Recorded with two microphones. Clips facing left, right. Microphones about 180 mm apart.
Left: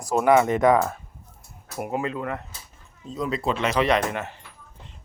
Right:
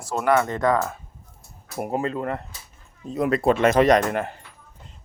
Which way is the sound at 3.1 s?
60° right (ahead or behind).